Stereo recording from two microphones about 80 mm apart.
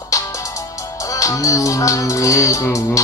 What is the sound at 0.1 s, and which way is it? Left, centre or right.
Music, left.